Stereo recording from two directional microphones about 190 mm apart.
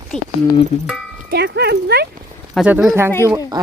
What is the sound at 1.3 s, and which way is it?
Speech, 60° right (ahead or behind).